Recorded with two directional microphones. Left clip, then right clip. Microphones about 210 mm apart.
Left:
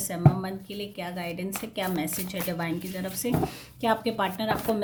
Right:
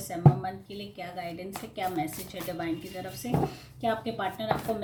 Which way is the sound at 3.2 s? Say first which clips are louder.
Left 1 dB; 45° left (ahead or behind).